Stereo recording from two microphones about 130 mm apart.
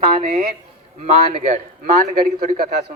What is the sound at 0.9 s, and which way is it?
Speech, 65° right (ahead or behind).